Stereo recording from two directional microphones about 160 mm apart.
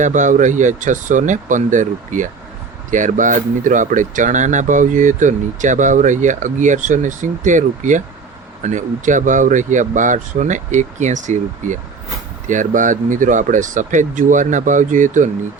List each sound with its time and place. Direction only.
0.0 s speech: 50° right (ahead or behind)